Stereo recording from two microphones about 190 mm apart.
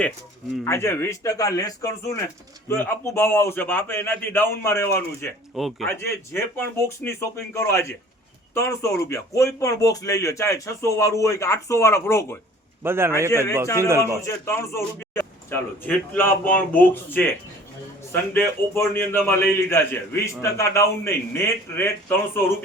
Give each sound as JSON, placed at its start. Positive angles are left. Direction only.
{"t": 0.6, "sound": "a man's voice", "side_deg": 15}
{"t": 5.5, "sound": "speech", "side_deg": 0}
{"t": 6.0, "sound": "a man's voice", "side_deg": 15}
{"t": 12.8, "sound": "a man's voice", "side_deg": -10}
{"t": 14.3, "sound": "a man's voice", "side_deg": 15}